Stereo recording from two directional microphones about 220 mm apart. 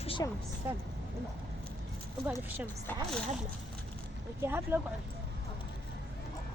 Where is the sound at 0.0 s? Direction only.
25° left (ahead or behind).